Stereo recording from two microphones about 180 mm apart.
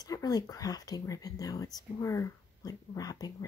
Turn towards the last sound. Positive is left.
turn(degrees=20)  # may be behind; listen again after turning